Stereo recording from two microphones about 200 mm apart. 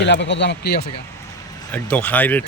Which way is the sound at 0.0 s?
60° left (ahead or behind).